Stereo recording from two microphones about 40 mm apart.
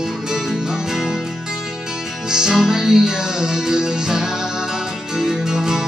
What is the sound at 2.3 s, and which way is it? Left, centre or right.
Music, centre.